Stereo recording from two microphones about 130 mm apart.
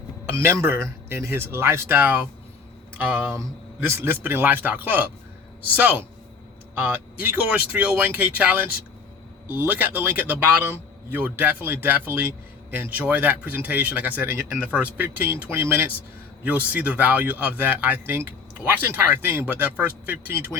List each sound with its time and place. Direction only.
0.3 s speech: 20° right (ahead or behind)